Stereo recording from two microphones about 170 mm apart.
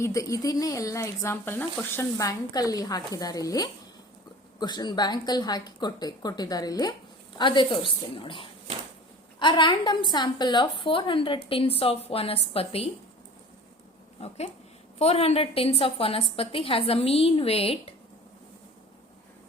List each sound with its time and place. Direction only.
0.0 s a woman's voice: 20° left (ahead or behind); by 12.9 s 35° left (ahead or behind)
14.2 s a woman's voice: 35° left (ahead or behind)